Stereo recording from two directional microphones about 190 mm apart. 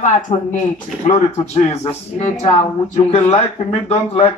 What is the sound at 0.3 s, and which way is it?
A man's voice, 35° left (ahead or behind).